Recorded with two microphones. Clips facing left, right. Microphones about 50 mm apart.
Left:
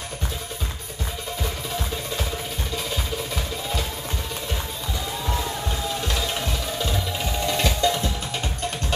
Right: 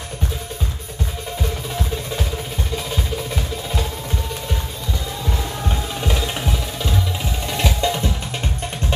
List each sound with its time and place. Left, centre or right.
6.0 s music: centre